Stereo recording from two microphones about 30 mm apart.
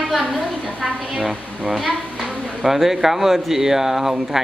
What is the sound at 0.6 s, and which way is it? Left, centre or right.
Speech, centre.